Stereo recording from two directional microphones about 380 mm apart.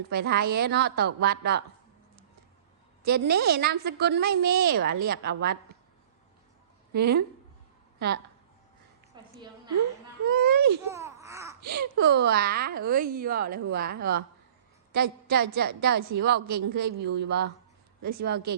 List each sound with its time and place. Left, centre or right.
0.1 s a woman's voice: right
3.0 s a woman's voice: right
6.9 s a woman's voice: right
9.2 s a sound: centre
10.4 s baby cry: right
10.8 s babbling: centre
11.9 s a woman's voice: right